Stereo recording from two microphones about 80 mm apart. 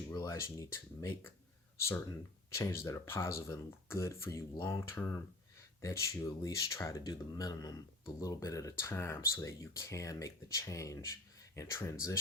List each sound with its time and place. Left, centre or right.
0.1 s speech: left
2.5 s speech: left
7.0 s speech: left